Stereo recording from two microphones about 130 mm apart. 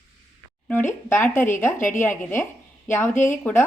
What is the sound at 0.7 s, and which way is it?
Speech, 15° left (ahead or behind).